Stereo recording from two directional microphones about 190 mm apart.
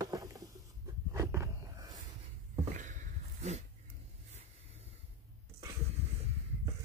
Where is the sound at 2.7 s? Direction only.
40° right (ahead or behind).